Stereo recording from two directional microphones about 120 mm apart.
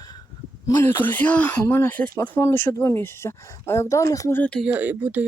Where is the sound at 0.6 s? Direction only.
20° left (ahead or behind).